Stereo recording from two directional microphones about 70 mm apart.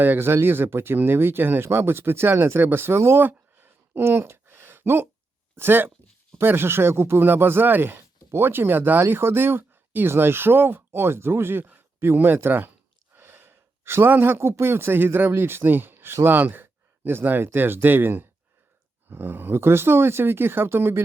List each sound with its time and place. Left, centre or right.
0.0 s speech: right
3.2 s a sound: right
5.5 s speech: right